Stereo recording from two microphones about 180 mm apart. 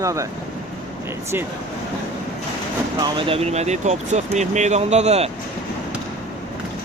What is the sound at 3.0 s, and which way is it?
Speech, 30° right (ahead or behind).